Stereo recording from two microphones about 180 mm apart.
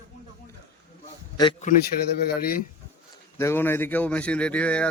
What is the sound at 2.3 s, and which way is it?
Speech, 55° left (ahead or behind).